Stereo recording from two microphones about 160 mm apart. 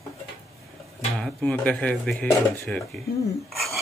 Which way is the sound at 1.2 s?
5° left (ahead or behind).